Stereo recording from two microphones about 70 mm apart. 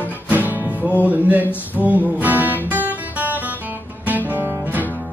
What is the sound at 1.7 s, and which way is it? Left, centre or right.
Music, right.